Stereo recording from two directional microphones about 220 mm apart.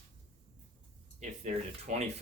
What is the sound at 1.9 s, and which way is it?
Speech, 35° right (ahead or behind).